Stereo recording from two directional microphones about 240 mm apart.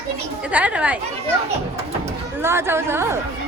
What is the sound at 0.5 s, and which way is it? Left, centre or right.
Speech, centre.